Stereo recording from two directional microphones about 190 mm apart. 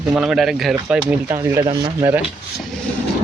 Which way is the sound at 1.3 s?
20° right (ahead or behind).